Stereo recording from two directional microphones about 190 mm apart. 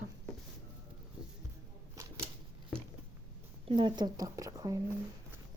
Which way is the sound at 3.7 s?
25° right (ahead or behind).